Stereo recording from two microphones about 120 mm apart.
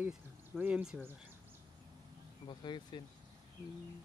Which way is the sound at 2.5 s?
40° left (ahead or behind).